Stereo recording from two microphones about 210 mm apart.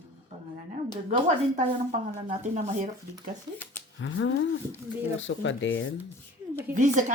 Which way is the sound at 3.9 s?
65° left (ahead or behind).